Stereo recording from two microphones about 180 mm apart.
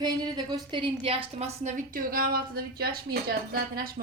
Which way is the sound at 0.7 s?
30° right (ahead or behind).